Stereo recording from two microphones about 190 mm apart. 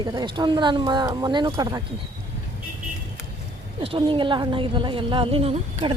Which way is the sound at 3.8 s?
30° right (ahead or behind).